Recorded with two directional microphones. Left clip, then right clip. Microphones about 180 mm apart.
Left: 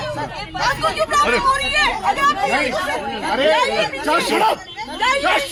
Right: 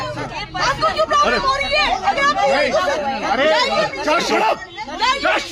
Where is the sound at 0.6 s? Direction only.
45° right (ahead or behind).